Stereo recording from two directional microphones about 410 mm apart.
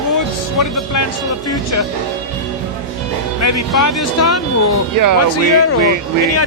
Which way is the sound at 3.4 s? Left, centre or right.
Left.